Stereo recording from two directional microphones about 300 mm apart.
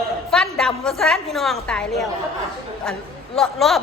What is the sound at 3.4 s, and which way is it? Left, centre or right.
Speech, centre.